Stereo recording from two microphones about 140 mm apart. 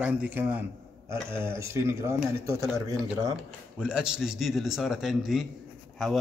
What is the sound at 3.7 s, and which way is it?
A man's voice, 5° right (ahead or behind).